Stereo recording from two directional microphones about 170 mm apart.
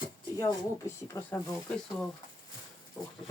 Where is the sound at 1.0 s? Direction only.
15° left (ahead or behind).